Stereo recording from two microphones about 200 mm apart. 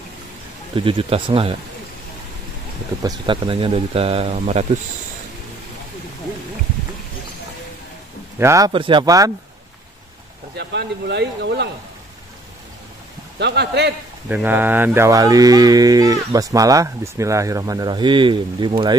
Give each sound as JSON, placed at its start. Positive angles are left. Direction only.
{"t": 0.7, "sound": "speech", "side_deg": -25}
{"t": 3.0, "sound": "speech", "side_deg": -20}
{"t": 8.4, "sound": "speech", "side_deg": -15}
{"t": 10.5, "sound": "speech", "side_deg": -55}
{"t": 13.4, "sound": "speech", "side_deg": -55}
{"t": 14.3, "sound": "speech", "side_deg": -10}